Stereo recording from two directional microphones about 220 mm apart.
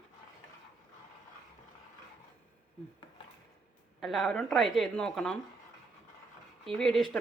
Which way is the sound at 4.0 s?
Centre (ahead or behind).